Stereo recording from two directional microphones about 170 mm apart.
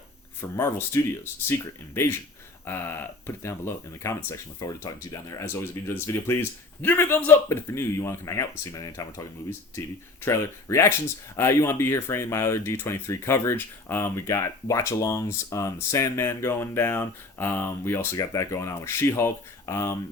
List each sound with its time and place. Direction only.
0.5 s speech: 15° left (ahead or behind)